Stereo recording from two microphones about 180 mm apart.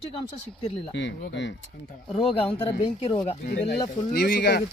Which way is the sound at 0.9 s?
80° left.